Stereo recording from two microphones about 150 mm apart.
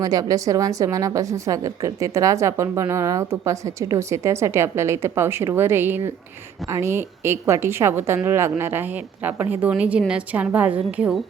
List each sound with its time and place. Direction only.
0.0 s a woman's voice: 25° right (ahead or behind); by 11.2 s 10° right (ahead or behind)